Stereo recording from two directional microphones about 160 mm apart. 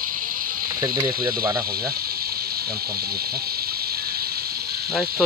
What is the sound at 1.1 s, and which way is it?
Speech, 65° right (ahead or behind).